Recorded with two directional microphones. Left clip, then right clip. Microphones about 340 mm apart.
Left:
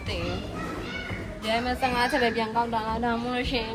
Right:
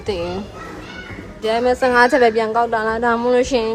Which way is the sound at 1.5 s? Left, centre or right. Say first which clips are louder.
Right 10 dB; right.